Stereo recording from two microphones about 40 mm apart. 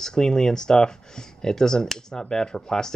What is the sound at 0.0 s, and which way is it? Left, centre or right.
Speech, centre.